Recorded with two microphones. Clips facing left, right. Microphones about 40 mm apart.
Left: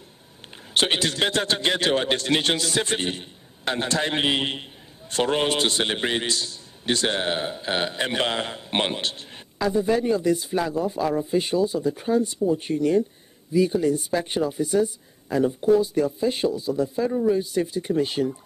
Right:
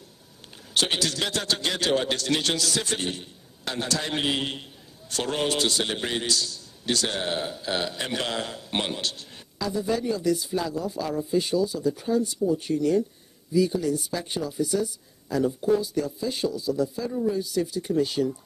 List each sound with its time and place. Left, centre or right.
0.7 s a man's voice: left